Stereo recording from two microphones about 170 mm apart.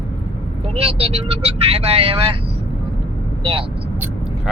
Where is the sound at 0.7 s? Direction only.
35° right (ahead or behind).